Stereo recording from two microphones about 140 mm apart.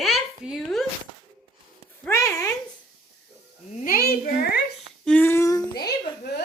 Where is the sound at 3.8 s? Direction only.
85° left.